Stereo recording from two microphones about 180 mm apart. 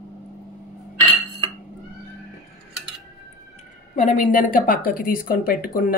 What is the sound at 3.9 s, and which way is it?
Speech, 45° left (ahead or behind).